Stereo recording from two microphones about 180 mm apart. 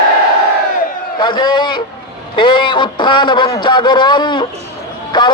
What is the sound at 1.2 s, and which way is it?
A man's voice, 25° left (ahead or behind).